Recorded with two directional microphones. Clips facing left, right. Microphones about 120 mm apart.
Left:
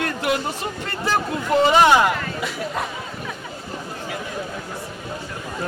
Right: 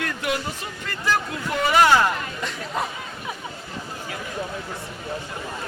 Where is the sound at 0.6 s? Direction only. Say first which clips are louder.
Left 3 dB; 30° left (ahead or behind).